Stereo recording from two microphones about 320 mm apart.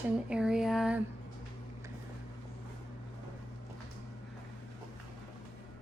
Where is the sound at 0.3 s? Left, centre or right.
Centre.